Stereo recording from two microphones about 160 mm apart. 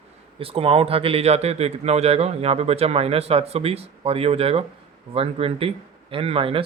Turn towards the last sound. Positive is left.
turn(degrees=-35)  # may be behind; listen again after turning